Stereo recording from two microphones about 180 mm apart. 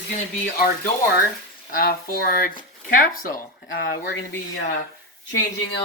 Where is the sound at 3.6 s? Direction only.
65° left (ahead or behind).